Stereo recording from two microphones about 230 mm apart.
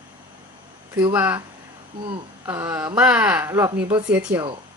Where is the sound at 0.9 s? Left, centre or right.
Centre.